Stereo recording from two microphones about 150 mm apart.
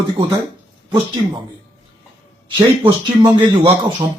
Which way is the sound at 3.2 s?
30° right (ahead or behind).